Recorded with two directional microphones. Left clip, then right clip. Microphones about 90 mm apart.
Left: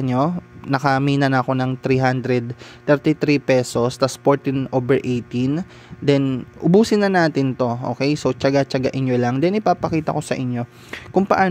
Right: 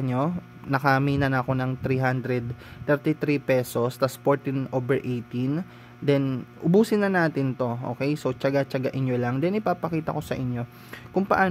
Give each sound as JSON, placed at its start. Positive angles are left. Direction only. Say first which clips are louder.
{"t": 0.0, "sound": "speech", "louder": "left 7 dB", "side_deg": 45}